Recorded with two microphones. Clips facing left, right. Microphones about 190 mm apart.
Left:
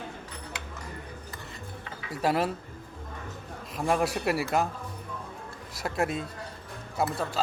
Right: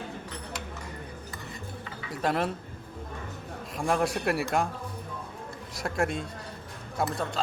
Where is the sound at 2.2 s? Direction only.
5° left (ahead or behind).